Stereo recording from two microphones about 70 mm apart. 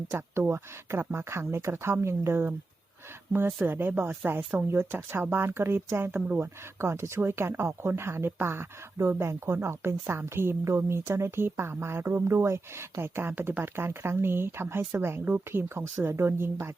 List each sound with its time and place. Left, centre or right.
0.1 s speech: right